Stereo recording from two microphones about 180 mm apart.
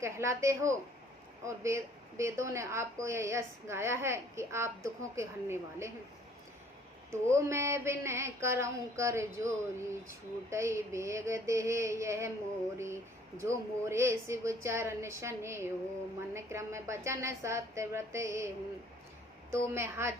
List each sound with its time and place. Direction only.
0.0 s a woman's voice: 15° right (ahead or behind)
7.1 s a woman's voice: 15° right (ahead or behind)